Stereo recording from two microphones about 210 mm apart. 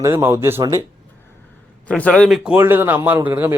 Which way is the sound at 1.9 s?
5° left (ahead or behind).